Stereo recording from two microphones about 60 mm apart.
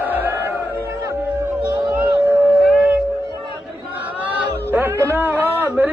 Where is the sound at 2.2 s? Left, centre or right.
Right.